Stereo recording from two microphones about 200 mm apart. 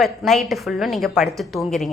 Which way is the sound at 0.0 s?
Centre (ahead or behind).